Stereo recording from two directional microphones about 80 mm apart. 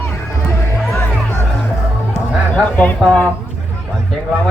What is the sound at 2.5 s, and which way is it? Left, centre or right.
Speech, centre.